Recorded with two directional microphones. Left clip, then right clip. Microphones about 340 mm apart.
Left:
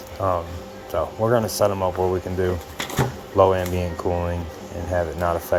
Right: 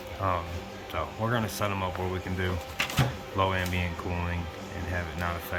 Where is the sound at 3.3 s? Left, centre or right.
Right.